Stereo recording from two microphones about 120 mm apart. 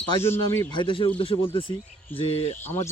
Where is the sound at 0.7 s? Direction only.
40° left (ahead or behind).